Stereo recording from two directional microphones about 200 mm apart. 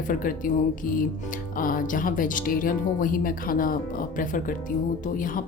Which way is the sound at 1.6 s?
45° left (ahead or behind).